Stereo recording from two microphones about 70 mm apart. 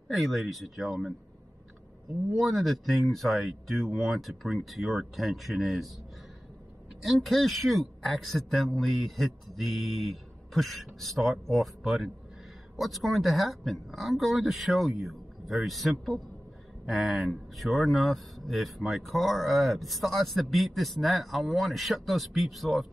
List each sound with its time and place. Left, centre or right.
0.1 s speech: centre
2.3 s speech: centre
7.2 s speech: centre